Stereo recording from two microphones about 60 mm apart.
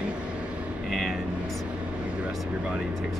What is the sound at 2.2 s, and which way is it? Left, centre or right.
Speech, centre.